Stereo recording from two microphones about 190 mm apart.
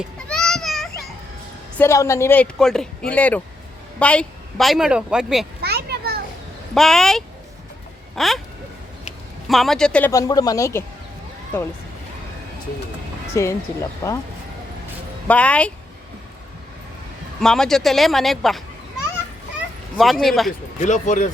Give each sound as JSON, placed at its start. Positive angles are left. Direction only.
{"t": 0.0, "sound": "children playing", "side_deg": 5}
{"t": 1.8, "sound": "a woman's voice", "side_deg": 15}
{"t": 5.6, "sound": "children playing", "side_deg": -55}
{"t": 6.7, "sound": "a woman's voice", "side_deg": 0}
{"t": 9.5, "sound": "a woman's voice", "side_deg": 0}
{"t": 10.1, "sound": "speech", "side_deg": 20}
{"t": 13.3, "sound": "speech", "side_deg": 15}
{"t": 15.3, "sound": "speech", "side_deg": 5}
{"t": 17.4, "sound": "a woman's voice", "side_deg": 5}
{"t": 20.0, "sound": "a woman's voice", "side_deg": 0}
{"t": 20.8, "sound": "speech", "side_deg": 40}